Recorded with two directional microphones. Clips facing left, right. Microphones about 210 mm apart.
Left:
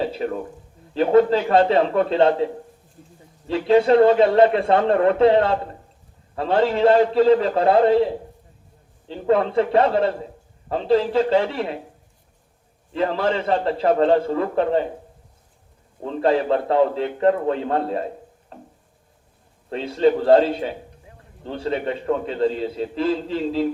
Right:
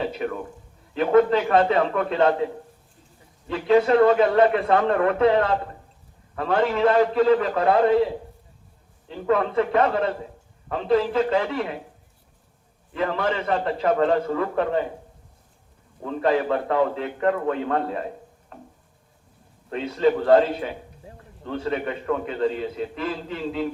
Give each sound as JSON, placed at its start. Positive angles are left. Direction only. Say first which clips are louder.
{"t": 0.0, "sound": "a man's voice", "louder": "left 3 dB", "side_deg": 30}
{"t": 9.0, "sound": "a man's voice", "louder": "left 3 dB", "side_deg": 30}
{"t": 12.9, "sound": "a man's voice", "louder": "left 3 dB", "side_deg": 30}
{"t": 16.0, "sound": "a man's voice", "louder": "left 2 dB", "side_deg": 30}
{"t": 18.5, "sound": "a sound", "louder": "left 2 dB", "side_deg": 30}
{"t": 19.7, "sound": "a man's voice", "louder": "left 3 dB", "side_deg": 30}